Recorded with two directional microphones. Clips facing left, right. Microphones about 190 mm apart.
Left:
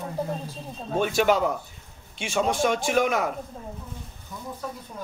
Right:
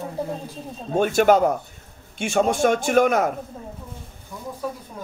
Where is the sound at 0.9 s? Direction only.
50° right (ahead or behind).